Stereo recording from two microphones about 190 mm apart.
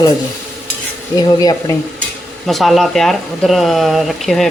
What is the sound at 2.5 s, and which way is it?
Speech, centre (ahead or behind).